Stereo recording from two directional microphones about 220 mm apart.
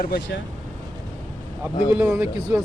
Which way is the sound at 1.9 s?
10° right (ahead or behind).